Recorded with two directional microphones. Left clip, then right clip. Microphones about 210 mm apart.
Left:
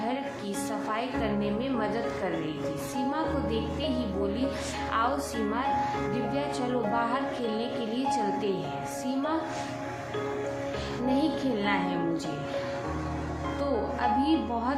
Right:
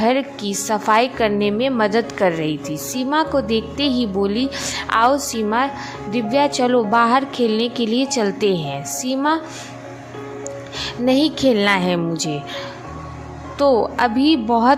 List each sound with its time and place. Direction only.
0.0 s a woman's voice: 50° right (ahead or behind)
10.8 s a woman's voice: 50° right (ahead or behind)
13.6 s a woman's voice: 50° right (ahead or behind)